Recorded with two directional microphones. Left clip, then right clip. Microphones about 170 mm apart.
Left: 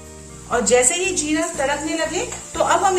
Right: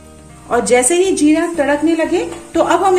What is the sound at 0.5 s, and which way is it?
Speech, 45° right (ahead or behind).